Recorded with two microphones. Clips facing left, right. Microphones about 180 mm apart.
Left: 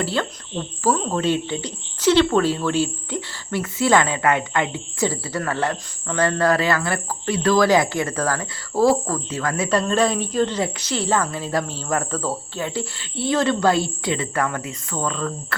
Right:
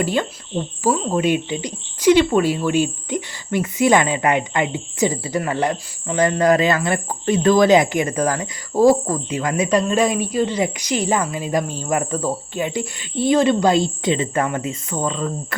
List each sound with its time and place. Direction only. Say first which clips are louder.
0.0 s speech: right 3 dB; 15° right (ahead or behind)